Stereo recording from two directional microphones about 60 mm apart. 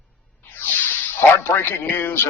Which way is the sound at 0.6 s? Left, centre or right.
Left.